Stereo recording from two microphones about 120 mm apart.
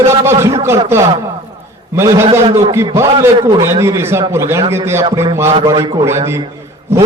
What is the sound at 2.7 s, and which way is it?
A man's voice, 25° right (ahead or behind).